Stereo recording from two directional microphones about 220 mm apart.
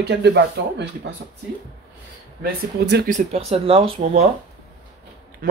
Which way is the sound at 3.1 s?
30° right (ahead or behind).